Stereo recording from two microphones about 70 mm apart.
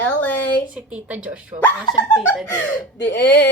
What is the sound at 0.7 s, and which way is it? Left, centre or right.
Speech, centre.